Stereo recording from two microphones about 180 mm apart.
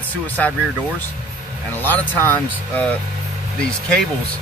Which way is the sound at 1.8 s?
10° left (ahead or behind).